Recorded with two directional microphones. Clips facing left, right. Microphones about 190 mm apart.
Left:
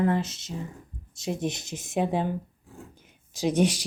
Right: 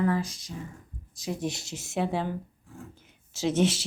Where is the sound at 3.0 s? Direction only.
15° left (ahead or behind).